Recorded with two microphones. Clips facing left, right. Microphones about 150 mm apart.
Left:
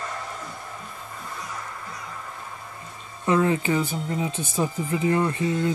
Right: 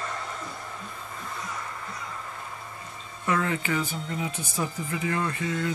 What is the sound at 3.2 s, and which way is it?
Speech, 25° left (ahead or behind).